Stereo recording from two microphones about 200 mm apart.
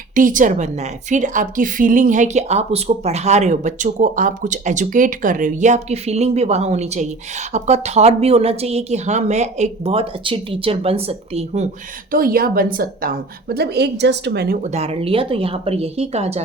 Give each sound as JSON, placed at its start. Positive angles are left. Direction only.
{"t": 0.1, "sound": "a woman's voice", "side_deg": -40}
{"t": 12.1, "sound": "a woman's voice", "side_deg": -45}